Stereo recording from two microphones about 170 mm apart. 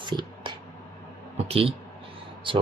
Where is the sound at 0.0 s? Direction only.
25° right (ahead or behind).